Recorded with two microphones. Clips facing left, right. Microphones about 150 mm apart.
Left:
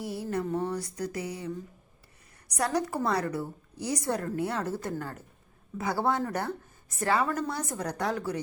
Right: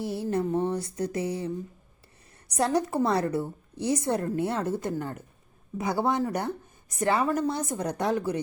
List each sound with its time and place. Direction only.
0.0 s a woman's voice: 25° right (ahead or behind)